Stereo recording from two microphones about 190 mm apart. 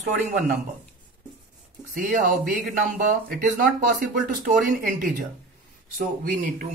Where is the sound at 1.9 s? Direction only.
45° right (ahead or behind).